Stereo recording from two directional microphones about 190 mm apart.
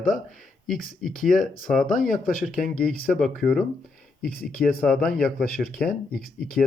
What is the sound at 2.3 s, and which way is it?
Speech, 45° left (ahead or behind).